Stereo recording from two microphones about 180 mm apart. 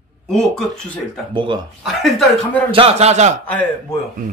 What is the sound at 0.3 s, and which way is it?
Speech, centre (ahead or behind).